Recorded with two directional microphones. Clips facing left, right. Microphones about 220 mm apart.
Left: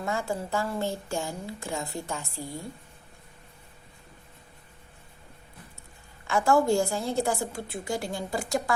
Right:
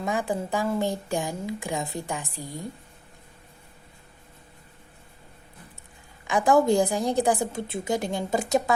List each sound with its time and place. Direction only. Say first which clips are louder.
0.0 s a woman's voice: right 3 dB; 15° right (ahead or behind)
6.2 s a woman's voice: right 3 dB; 15° right (ahead or behind)